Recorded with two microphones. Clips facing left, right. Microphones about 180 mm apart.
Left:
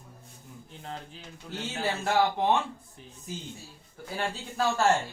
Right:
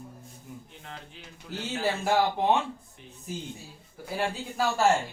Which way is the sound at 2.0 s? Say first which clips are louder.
Left 1 dB; 5° right (ahead or behind).